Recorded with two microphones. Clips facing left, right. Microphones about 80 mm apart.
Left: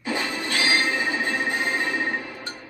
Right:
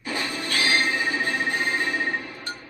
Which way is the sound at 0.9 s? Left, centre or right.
Left.